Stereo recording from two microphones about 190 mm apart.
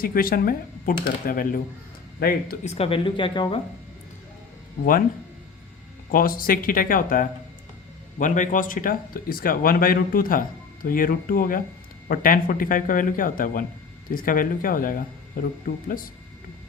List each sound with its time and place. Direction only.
0.0 s speech: 50° left (ahead or behind)
2.6 s speech: 30° left (ahead or behind)
4.8 s speech: 45° left (ahead or behind)
6.1 s speech: 50° left (ahead or behind)